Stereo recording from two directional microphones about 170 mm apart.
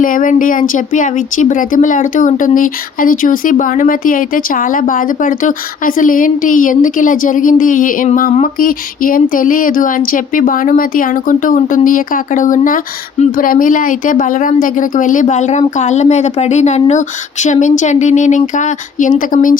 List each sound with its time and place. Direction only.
0.0 s speech: 55° left (ahead or behind)